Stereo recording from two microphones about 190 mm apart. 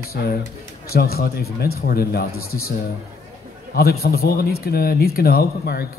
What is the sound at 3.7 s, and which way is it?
A man's voice, 55° left (ahead or behind).